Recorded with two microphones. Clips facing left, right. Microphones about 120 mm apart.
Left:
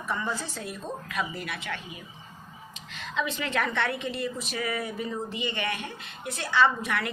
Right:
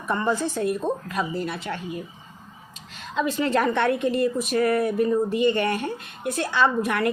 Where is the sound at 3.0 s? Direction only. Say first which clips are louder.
Right 7 dB; 40° right (ahead or behind).